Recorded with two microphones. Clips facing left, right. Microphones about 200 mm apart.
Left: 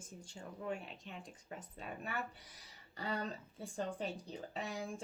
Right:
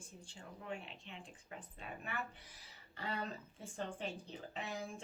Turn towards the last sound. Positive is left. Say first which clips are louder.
# left 2 dB
turn(degrees=35)  # may be behind; listen again after turning